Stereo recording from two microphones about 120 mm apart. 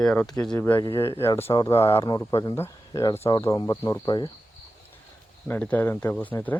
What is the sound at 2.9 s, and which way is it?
Speech, 35° left (ahead or behind).